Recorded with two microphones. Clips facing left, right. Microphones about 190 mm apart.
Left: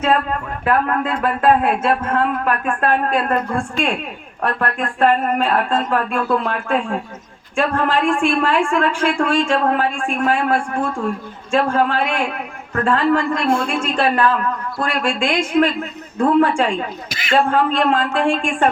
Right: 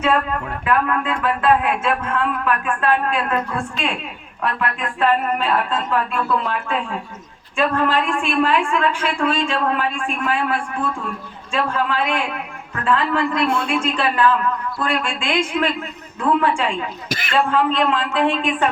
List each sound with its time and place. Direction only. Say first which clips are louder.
0.6 s a woman's voice: left 2 dB; 40° left (ahead or behind)